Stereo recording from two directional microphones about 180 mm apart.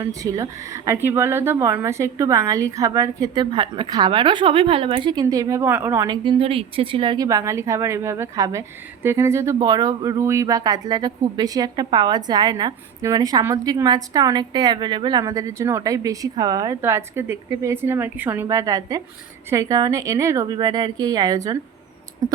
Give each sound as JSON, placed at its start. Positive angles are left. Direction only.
{"t": 0.0, "sound": "speech", "side_deg": -20}
{"t": 6.1, "sound": "speech", "side_deg": -30}